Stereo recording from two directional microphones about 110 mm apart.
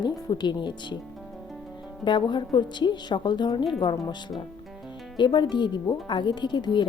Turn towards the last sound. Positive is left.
turn(degrees=45)  # may be behind; listen again after turning